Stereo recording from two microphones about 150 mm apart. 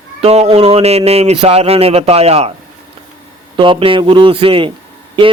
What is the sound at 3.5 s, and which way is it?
A man's voice, 35° right (ahead or behind).